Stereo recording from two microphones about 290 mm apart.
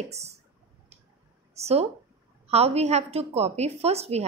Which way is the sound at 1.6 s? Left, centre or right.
Right.